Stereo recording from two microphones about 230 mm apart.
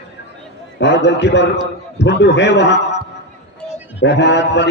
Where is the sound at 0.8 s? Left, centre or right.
Left.